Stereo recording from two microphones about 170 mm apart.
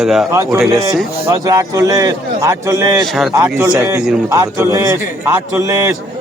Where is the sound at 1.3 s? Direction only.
20° right (ahead or behind).